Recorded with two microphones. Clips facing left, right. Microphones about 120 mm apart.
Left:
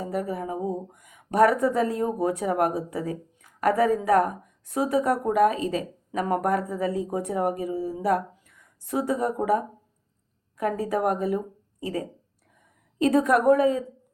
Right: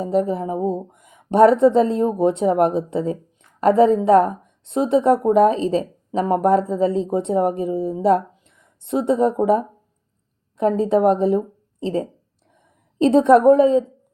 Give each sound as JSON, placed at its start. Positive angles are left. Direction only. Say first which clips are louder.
{"t": 0.0, "sound": "a woman's voice", "louder": "right 9 dB", "side_deg": -25}